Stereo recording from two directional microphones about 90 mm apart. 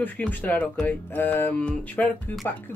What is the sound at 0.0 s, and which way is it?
Speech, 20° left (ahead or behind).